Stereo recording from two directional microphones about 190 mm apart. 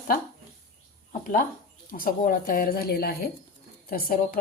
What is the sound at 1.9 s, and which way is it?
A woman's voice, 45° left (ahead or behind).